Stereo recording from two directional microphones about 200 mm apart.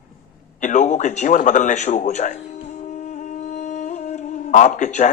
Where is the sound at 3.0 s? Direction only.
35° left (ahead or behind).